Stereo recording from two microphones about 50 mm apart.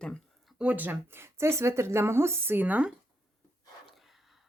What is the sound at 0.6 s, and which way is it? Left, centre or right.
Speech, right.